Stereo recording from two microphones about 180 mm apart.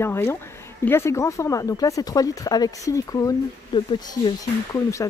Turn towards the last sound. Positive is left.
turn(degrees=15)  # may be behind; listen again after turning